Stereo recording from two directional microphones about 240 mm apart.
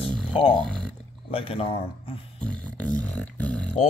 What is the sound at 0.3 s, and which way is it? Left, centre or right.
Speech, left.